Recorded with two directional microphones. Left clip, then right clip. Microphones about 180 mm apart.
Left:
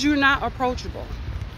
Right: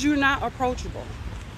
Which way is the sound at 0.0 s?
15° left (ahead or behind).